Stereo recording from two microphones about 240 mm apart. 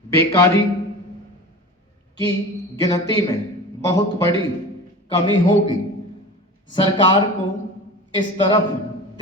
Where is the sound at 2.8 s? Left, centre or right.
Centre.